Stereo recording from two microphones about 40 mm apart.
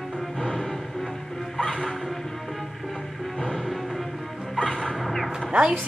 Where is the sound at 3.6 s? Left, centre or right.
Centre.